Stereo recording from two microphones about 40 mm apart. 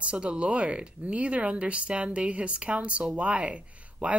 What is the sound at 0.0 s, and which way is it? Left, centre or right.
Speech, right.